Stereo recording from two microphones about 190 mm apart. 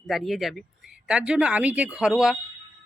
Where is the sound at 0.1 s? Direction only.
Centre (ahead or behind).